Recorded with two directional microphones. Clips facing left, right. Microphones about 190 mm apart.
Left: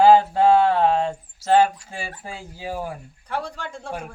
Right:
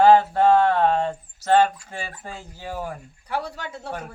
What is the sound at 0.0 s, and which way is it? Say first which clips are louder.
Speech: left 1 dB; 10° left (ahead or behind).